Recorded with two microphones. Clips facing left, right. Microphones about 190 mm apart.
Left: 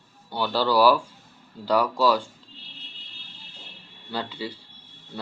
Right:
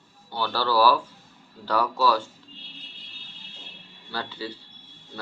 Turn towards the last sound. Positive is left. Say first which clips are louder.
# left 2 dB
turn(degrees=15)  # may be behind; listen again after turning